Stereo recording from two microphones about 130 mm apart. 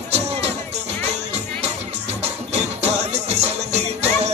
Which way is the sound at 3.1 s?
55° right (ahead or behind).